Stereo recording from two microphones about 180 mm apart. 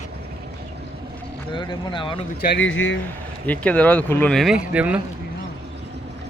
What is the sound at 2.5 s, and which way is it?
Speech, 90° left.